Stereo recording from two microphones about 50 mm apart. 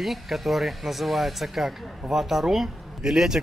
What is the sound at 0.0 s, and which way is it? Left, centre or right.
Speech, centre.